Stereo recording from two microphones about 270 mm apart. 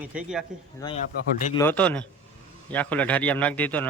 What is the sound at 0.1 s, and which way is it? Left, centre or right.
Speech, centre.